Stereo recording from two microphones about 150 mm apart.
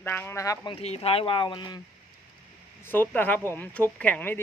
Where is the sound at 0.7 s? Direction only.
40° left (ahead or behind).